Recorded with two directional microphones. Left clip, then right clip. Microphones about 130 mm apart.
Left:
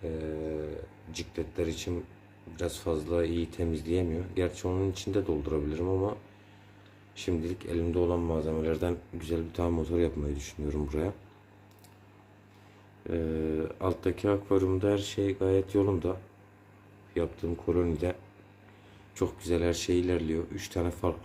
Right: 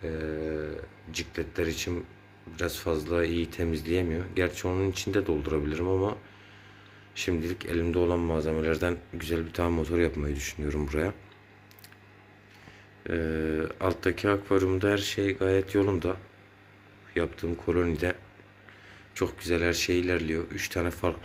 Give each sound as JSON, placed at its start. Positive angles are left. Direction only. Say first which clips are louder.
{"t": 0.0, "sound": "a sound", "louder": "right 2 dB", "side_deg": 0}
{"t": 2.6, "sound": "speech", "louder": "right 2 dB", "side_deg": 5}
{"t": 7.1, "sound": "speech", "louder": "right 3 dB", "side_deg": 5}
{"t": 13.1, "sound": "speech", "louder": "right 2 dB", "side_deg": 10}
{"t": 17.2, "sound": "speech", "louder": "right 2 dB", "side_deg": 15}
{"t": 19.1, "sound": "speech", "louder": "right 2 dB", "side_deg": 25}